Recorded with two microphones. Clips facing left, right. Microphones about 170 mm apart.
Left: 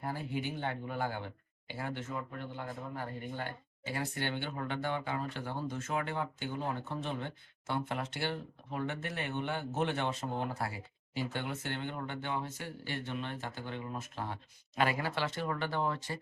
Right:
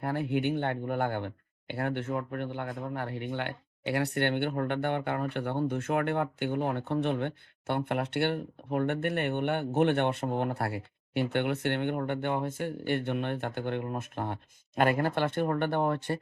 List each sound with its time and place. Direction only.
0.0 s speech: 65° right (ahead or behind)